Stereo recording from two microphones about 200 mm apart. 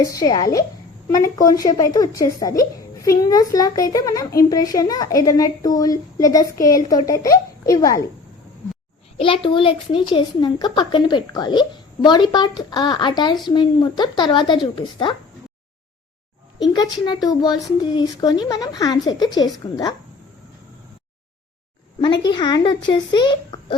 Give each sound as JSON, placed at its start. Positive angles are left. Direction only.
{"t": 0.0, "sound": "speech", "side_deg": 15}
{"t": 9.1, "sound": "speech", "side_deg": 25}
{"t": 16.7, "sound": "speech", "side_deg": 20}
{"t": 22.0, "sound": "speech", "side_deg": 20}